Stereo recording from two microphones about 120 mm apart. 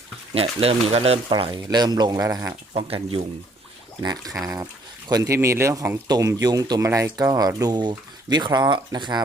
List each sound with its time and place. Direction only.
0.3 s speech: 55° right (ahead or behind)
1.3 s speech: 45° right (ahead or behind); by 2.6 s 25° right (ahead or behind)
2.7 s speech: 50° right (ahead or behind)
4.0 s speech: 35° right (ahead or behind)
6.1 s speech: 30° right (ahead or behind)